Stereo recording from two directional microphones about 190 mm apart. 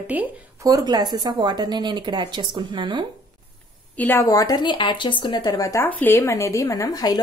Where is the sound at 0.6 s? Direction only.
20° right (ahead or behind).